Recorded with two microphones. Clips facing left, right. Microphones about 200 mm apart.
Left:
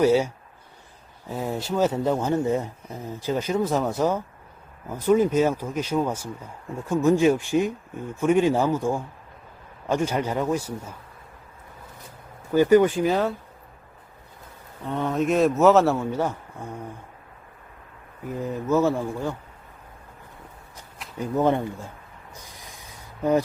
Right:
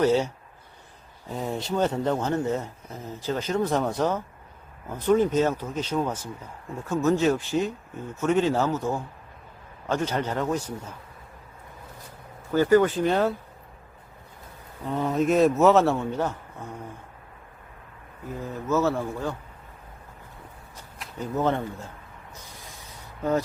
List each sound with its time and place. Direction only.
0.0 s speech: 10° left (ahead or behind)
1.3 s speech: 5° left (ahead or behind)
12.5 s speech: 15° left (ahead or behind)
13.1 s speech: centre (ahead or behind)
14.8 s speech: centre (ahead or behind)
18.3 s speech: 15° left (ahead or behind)
21.2 s speech: 15° left (ahead or behind)
22.6 s a sound: 15° left (ahead or behind)